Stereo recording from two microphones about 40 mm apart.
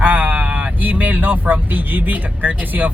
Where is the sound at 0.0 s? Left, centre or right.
Right.